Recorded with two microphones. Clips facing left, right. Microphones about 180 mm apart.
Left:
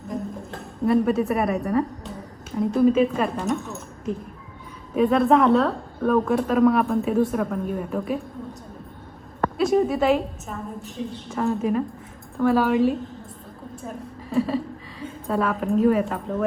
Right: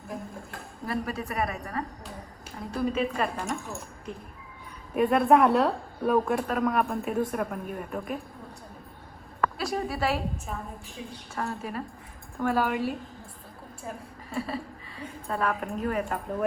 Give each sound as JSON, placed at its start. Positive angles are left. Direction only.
{"t": 0.9, "sound": "a woman's voice", "side_deg": 0}
{"t": 9.6, "sound": "a woman's voice", "side_deg": 0}
{"t": 12.4, "sound": "a woman's voice", "side_deg": -10}
{"t": 14.3, "sound": "a sound", "side_deg": 40}
{"t": 15.0, "sound": "a woman's voice", "side_deg": 0}